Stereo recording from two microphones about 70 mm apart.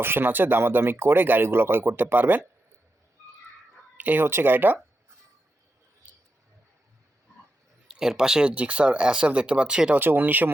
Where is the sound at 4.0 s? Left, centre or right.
Right.